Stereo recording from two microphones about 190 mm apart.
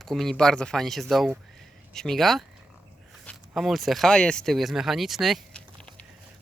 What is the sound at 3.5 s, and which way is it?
Speech, centre (ahead or behind).